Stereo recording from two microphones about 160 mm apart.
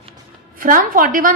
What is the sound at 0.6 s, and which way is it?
Speech, 60° right (ahead or behind).